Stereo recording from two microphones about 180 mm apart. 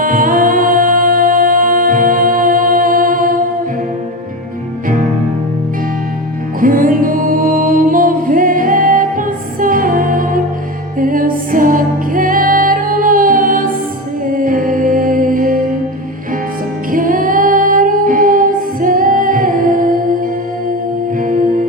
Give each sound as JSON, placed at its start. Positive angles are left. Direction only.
{"t": 0.0, "sound": "music", "side_deg": -50}
{"t": 6.6, "sound": "music", "side_deg": -50}
{"t": 16.9, "sound": "music", "side_deg": -50}
{"t": 21.2, "sound": "music", "side_deg": -50}